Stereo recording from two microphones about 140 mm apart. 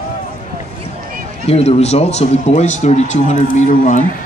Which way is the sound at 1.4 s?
45° left (ahead or behind).